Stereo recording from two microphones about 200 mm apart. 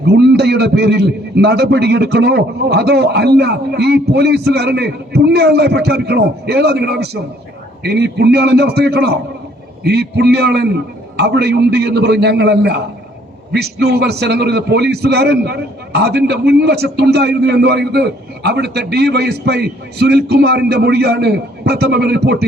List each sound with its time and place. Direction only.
0.0 s a man's voice: 55° right (ahead or behind)